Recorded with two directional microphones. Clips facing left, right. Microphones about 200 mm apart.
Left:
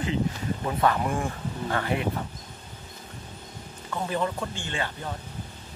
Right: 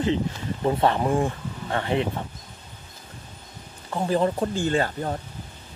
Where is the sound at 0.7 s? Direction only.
30° right (ahead or behind).